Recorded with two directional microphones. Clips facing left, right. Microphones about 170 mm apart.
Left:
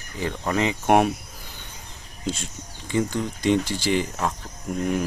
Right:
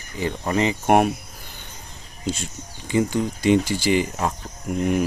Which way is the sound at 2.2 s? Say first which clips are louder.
Right 2 dB; centre (ahead or behind).